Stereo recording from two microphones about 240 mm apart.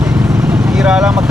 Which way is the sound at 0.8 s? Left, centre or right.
Centre.